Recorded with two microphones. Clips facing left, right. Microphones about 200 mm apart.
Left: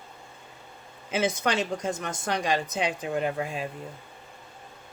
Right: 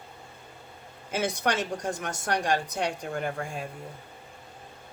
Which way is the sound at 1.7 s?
15° right (ahead or behind).